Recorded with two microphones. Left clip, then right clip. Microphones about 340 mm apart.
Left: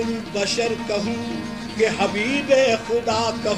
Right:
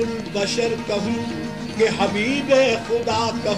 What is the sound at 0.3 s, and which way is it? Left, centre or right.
Music, centre.